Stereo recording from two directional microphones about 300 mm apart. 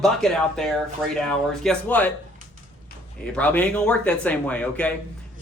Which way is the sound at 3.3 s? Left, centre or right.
Centre.